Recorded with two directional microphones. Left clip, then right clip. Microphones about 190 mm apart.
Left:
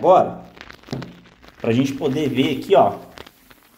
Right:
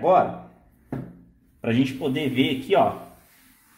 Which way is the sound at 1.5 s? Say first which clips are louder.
Left 4 dB; 15° left (ahead or behind).